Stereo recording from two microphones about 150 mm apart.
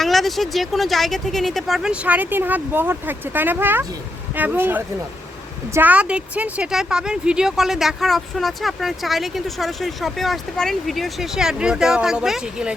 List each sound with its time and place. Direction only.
0.0 s speech: centre (ahead or behind)